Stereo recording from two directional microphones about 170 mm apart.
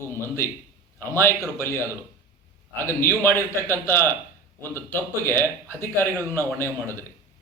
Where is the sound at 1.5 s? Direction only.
15° left (ahead or behind).